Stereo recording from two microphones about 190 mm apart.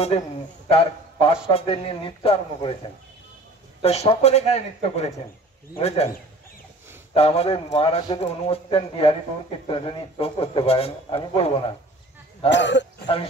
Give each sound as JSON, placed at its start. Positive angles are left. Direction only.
{"t": 0.7, "sound": "a sound", "side_deg": 30}
{"t": 1.5, "sound": "a man's voice", "side_deg": 30}
{"t": 7.2, "sound": "a man's voice", "side_deg": 30}
{"t": 12.4, "sound": "speech", "side_deg": 70}